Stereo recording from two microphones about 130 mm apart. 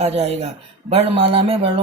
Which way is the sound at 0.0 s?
55° right (ahead or behind).